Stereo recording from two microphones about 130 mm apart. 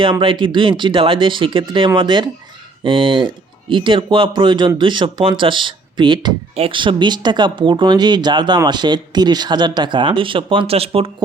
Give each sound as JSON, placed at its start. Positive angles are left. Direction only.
{"t": 0.0, "sound": "speech", "side_deg": -40}